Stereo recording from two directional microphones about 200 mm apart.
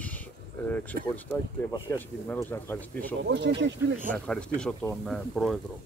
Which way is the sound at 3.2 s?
60° right (ahead or behind).